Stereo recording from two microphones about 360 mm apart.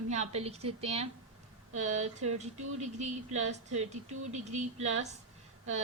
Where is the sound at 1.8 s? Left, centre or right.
Centre.